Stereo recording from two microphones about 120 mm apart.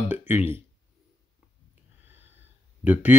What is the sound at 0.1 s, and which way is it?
Speech, 15° right (ahead or behind).